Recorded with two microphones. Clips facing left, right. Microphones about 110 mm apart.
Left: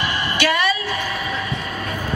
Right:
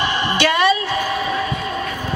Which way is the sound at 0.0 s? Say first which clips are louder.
Right 3 dB; 25° right (ahead or behind).